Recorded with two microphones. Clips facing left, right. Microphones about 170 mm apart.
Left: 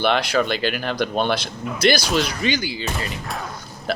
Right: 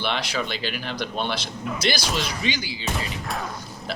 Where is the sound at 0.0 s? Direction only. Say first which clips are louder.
Left 8 dB; 55° left (ahead or behind).